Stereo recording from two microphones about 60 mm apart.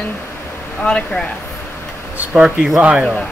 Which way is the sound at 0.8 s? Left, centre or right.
Centre.